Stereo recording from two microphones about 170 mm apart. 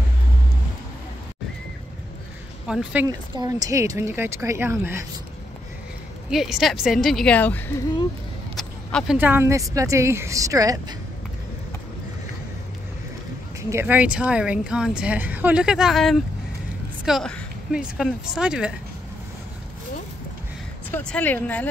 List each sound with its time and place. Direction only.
2.6 s speech: 5° right (ahead or behind)
3.1 s speech: 20° right (ahead or behind)
6.3 s a woman's voice: centre (ahead or behind)
8.5 s speech: centre (ahead or behind); by 11.0 s 20° right (ahead or behind)
13.6 s speech: 15° right (ahead or behind)
20.9 s speech: 10° left (ahead or behind)